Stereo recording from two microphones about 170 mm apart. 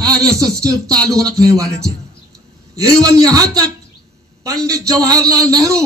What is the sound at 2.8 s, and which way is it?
Speech, 20° right (ahead or behind).